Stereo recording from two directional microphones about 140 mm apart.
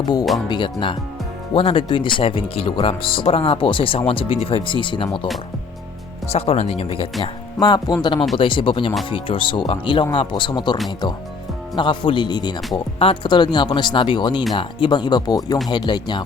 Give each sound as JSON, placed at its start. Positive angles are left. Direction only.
{"t": 0.4, "sound": "speech", "side_deg": 35}
{"t": 6.2, "sound": "speech", "side_deg": 45}
{"t": 7.2, "sound": "speech", "side_deg": 30}